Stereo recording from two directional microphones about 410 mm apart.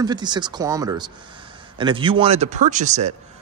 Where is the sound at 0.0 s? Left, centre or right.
Centre.